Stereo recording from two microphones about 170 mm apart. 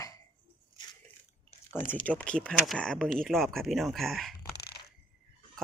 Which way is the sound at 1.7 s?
10° left (ahead or behind).